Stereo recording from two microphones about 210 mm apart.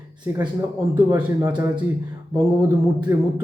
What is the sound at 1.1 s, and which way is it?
Speech, 10° right (ahead or behind).